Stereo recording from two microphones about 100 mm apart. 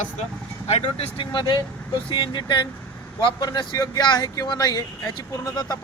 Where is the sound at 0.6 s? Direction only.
80° left.